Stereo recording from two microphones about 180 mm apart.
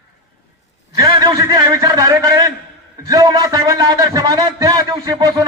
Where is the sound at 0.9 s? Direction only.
20° right (ahead or behind).